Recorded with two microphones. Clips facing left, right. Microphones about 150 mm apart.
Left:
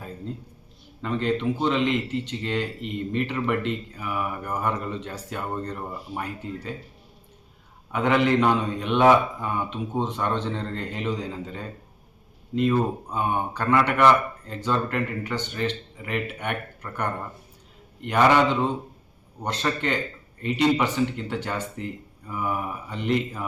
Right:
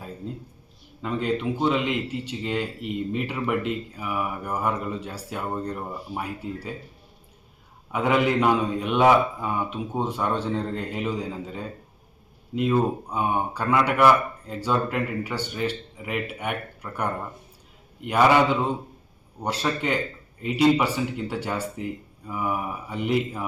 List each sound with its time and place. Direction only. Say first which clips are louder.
1.0 s speech: left 1 dB; 10° right (ahead or behind)
7.9 s speech: left 1 dB; 5° right (ahead or behind)